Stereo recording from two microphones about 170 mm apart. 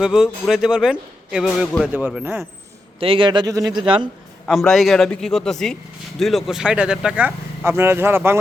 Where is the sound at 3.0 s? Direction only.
30° right (ahead or behind).